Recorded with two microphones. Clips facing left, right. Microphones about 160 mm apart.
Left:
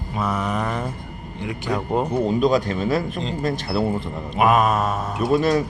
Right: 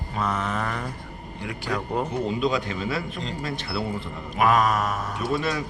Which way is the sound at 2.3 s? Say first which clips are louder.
Left 6 dB; 45° left (ahead or behind).